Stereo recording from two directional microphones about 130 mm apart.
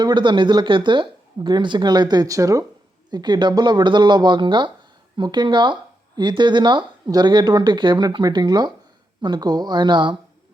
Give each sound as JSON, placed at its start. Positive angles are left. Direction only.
{"t": 0.0, "sound": "speech", "side_deg": -35}